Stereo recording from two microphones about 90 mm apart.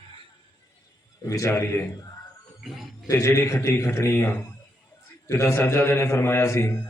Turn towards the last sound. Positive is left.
turn(degrees=30)  # may be behind; listen again after turning